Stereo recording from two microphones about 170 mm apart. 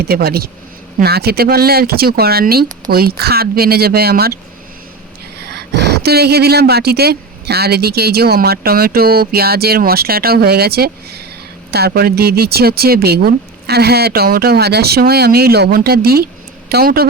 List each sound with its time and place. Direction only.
0.1 s speech: 65° right (ahead or behind)
5.4 s speech: 75° right (ahead or behind)